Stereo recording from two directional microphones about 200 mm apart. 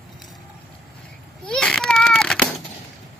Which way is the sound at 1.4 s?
5° left (ahead or behind).